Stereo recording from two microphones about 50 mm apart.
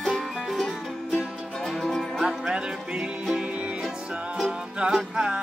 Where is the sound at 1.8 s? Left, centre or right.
Centre.